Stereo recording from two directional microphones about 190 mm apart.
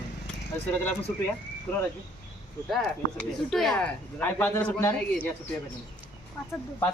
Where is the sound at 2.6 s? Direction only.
Centre (ahead or behind).